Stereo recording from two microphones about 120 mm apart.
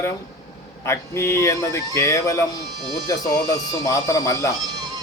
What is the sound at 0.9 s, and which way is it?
Speech, 25° left (ahead or behind).